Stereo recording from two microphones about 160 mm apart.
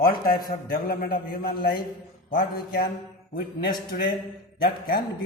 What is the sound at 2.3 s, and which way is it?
Mantra, 60° left (ahead or behind).